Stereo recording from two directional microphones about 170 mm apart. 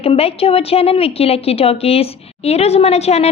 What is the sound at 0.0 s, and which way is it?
A woman's voice, 35° left (ahead or behind).